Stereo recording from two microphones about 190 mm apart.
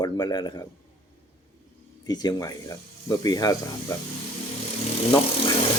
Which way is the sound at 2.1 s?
20° left (ahead or behind).